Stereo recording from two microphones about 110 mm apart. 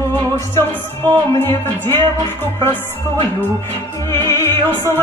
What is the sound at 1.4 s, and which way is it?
Music, 20° left (ahead or behind).